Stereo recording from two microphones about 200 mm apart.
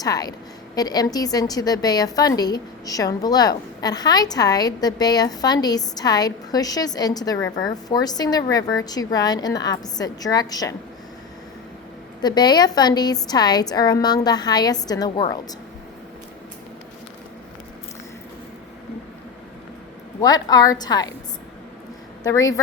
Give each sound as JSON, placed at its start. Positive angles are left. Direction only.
{"t": 0.0, "sound": "a woman's voice", "side_deg": 20}
{"t": 12.2, "sound": "a woman's voice", "side_deg": 20}
{"t": 20.2, "sound": "a woman's voice", "side_deg": 20}
{"t": 22.2, "sound": "a woman's voice", "side_deg": 15}